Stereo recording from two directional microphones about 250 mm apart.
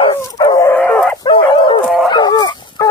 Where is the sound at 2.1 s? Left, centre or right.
Centre.